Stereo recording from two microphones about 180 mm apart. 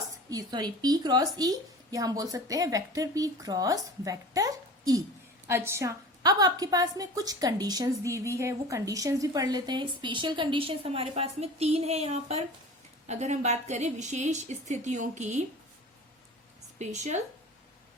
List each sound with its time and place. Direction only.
0.3 s a woman's voice: 20° right (ahead or behind); by 15.4 s 40° right (ahead or behind)
16.7 s speech: 40° right (ahead or behind)